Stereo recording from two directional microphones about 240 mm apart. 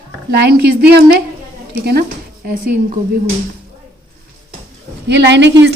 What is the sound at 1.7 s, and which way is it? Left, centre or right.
Speech, right.